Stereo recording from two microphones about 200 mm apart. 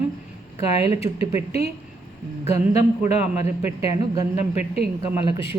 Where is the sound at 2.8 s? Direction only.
30° left (ahead or behind).